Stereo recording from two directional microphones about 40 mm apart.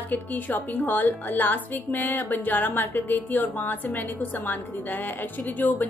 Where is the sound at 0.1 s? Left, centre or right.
Left.